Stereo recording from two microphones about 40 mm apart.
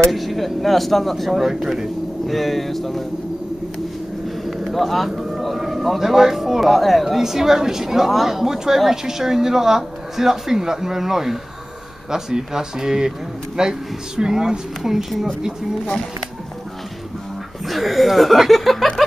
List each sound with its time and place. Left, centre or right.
0.1 s speech: centre
4.6 s speech: centre
7.2 s speech: centre
17.6 s speech: centre